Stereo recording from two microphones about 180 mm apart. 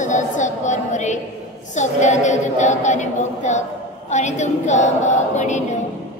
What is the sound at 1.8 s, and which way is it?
Speech, 40° left (ahead or behind).